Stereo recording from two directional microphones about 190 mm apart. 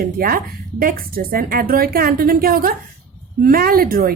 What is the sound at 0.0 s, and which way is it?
Speech, 50° right (ahead or behind).